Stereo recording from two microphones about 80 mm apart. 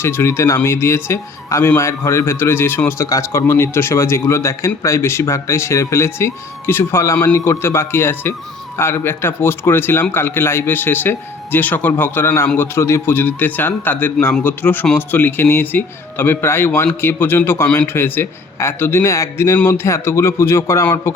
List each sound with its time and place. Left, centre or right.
0.0 s a man's voice: left